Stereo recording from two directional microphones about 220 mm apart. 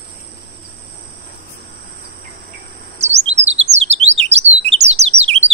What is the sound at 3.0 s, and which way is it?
Chirp, 30° right (ahead or behind).